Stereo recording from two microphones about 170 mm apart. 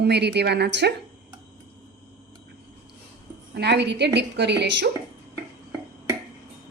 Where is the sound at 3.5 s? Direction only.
90° right.